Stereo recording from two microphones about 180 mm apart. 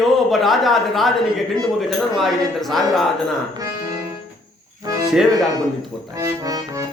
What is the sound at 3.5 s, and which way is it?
Music, 20° right (ahead or behind).